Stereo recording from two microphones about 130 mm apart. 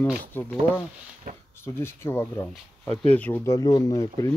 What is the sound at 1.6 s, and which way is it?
Speech, 20° left (ahead or behind).